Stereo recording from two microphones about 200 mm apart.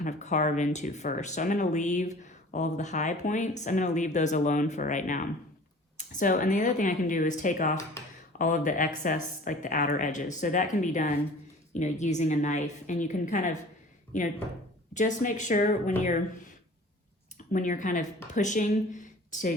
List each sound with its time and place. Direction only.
0.0 s speech: 35° left (ahead or behind)
17.3 s speech: 40° left (ahead or behind)